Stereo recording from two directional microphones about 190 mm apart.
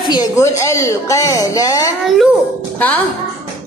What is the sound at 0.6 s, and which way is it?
A child's voice, 15° left (ahead or behind).